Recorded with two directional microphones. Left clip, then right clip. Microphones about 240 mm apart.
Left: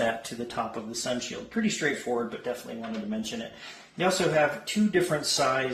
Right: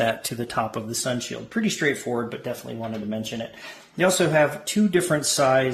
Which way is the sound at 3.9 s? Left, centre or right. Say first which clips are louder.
Right 5 dB; right.